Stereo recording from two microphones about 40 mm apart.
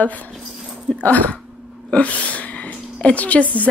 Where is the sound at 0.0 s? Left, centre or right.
Left.